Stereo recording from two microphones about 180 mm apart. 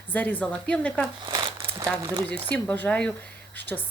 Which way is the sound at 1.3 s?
20° right (ahead or behind).